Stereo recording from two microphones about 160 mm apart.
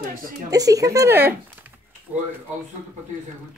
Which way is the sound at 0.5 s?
20° right (ahead or behind).